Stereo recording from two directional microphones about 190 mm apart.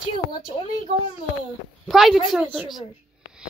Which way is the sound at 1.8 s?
Centre (ahead or behind).